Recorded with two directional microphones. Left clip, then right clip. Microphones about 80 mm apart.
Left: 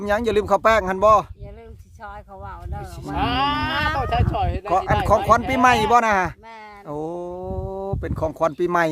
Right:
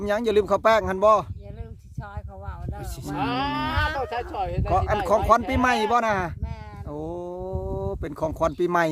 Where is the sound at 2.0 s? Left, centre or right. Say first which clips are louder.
Left 5 dB; left.